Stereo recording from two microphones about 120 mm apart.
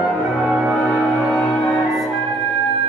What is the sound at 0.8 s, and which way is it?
Music, 15° left (ahead or behind).